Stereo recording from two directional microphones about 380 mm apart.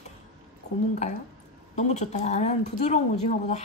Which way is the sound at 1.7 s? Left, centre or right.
Centre.